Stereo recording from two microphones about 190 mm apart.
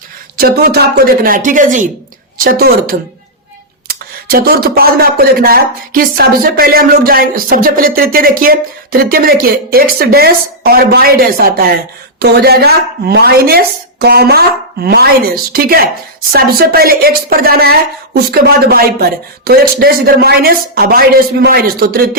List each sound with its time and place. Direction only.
0.3 s a woman's voice: 55° right (ahead or behind)